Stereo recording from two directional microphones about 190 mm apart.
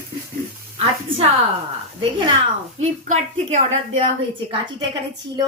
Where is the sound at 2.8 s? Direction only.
35° right (ahead or behind).